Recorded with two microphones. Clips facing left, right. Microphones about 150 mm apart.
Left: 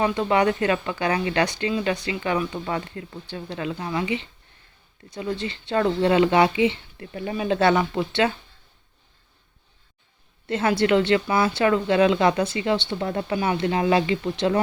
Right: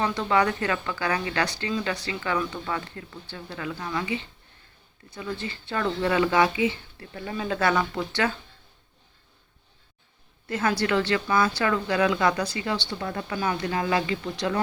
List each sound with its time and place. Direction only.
0.0 s a woman's voice: 15° left (ahead or behind)
10.4 s a woman's voice: 25° left (ahead or behind)